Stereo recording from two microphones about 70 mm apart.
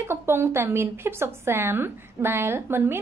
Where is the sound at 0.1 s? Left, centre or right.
Right.